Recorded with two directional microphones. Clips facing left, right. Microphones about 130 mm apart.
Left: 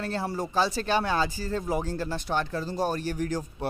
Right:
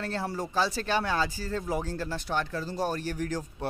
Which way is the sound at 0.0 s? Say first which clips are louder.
Left 2 dB; 15° left (ahead or behind).